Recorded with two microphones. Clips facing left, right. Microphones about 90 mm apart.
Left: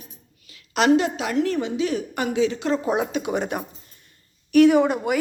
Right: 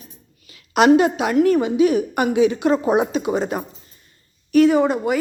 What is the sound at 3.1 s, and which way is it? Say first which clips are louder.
A woman's voice: right 4 dB; centre (ahead or behind).